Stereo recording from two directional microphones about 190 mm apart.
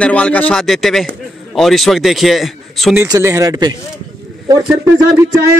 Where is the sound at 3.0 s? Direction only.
15° right (ahead or behind).